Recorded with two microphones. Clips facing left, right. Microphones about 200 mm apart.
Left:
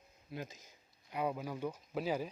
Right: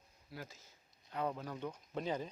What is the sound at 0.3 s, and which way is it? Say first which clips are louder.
Speech: left 5 dB; 20° left (ahead or behind).